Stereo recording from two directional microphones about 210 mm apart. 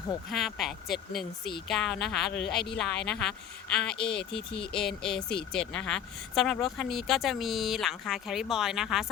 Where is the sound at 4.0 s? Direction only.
50° left (ahead or behind).